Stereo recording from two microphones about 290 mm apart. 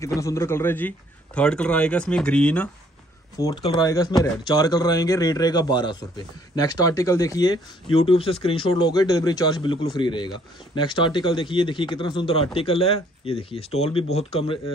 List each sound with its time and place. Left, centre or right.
0.0 s a man's voice: centre
3.3 s speech: centre